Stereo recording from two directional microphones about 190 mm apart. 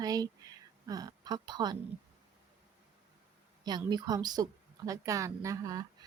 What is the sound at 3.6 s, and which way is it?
A woman's voice, 20° right (ahead or behind).